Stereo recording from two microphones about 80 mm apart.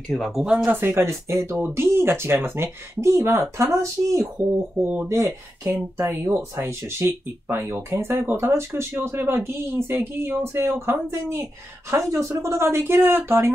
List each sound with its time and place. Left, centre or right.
0.1 s speech: centre
0.7 s speech: right